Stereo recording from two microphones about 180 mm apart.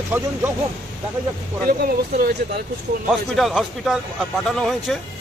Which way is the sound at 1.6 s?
55° right (ahead or behind).